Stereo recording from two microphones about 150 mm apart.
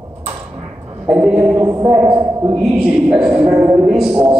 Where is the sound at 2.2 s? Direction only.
35° right (ahead or behind).